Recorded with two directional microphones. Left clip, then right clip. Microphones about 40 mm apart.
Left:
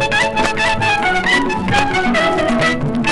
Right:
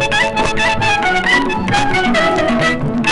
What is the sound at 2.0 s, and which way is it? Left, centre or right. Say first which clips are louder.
Music: right 1 dB; centre.